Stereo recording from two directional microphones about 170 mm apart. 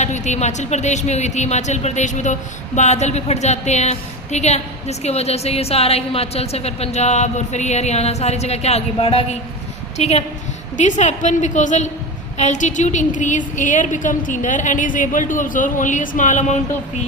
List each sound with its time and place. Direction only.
0.0 s a woman's voice: 45° left (ahead or behind)